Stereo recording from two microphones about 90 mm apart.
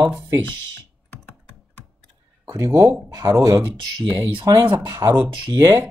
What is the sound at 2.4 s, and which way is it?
Speech, 40° right (ahead or behind).